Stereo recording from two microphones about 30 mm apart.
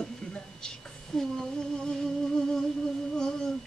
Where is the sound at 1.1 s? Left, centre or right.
Centre.